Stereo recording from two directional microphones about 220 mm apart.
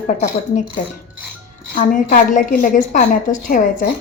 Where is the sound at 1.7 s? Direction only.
40° left (ahead or behind).